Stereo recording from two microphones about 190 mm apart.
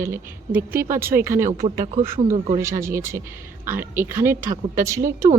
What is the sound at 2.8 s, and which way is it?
Speech, 15° right (ahead or behind).